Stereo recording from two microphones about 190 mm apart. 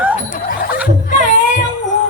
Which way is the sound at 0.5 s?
50° left (ahead or behind).